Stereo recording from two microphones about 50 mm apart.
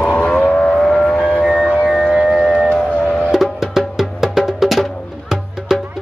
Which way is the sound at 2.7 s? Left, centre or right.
Left.